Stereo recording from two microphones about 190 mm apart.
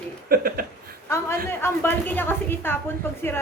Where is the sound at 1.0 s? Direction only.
15° left (ahead or behind).